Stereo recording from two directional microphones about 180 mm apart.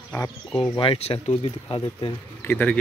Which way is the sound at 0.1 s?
10° left (ahead or behind).